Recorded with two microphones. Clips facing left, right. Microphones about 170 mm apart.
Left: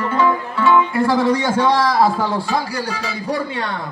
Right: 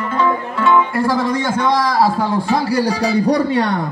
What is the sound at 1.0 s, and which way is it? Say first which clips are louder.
Speech: left 1 dB; 25° left (ahead or behind).